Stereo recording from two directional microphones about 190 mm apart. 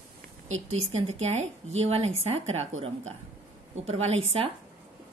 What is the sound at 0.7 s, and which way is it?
A woman's voice, 35° right (ahead or behind).